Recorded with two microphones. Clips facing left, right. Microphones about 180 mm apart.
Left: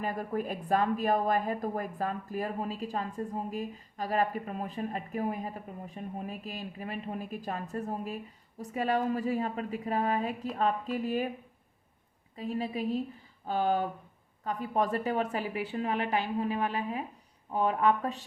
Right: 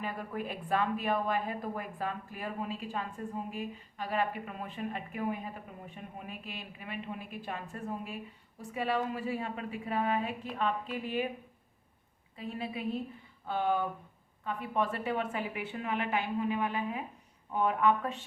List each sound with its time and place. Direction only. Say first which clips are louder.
0.0 s a woman's voice: left 5 dB; 40° left (ahead or behind)
12.4 s a woman's voice: left 5 dB; 40° left (ahead or behind)